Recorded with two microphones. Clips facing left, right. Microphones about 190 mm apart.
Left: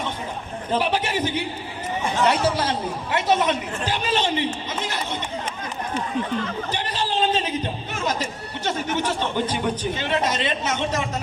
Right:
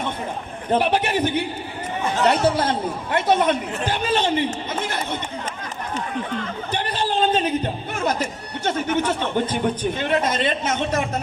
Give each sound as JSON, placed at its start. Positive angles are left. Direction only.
{"t": 0.7, "sound": "a man's voice", "side_deg": -55}
{"t": 2.6, "sound": "a man's voice", "side_deg": -55}
{"t": 6.7, "sound": "a man's voice", "side_deg": -55}